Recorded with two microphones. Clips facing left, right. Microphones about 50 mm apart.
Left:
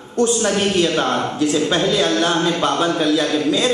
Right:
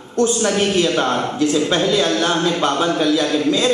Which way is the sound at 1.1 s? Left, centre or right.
Left.